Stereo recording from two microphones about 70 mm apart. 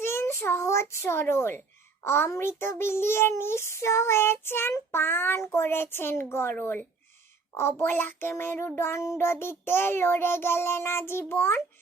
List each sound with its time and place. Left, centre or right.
0.0 s a child's voice: left
4.9 s child singing: left
6.6 s speech: left
7.5 s a woman's voice: left
7.8 s child singing: left